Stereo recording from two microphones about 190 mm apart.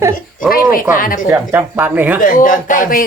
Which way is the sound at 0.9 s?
45° left (ahead or behind).